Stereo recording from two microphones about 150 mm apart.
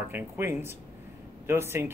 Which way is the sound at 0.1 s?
15° right (ahead or behind).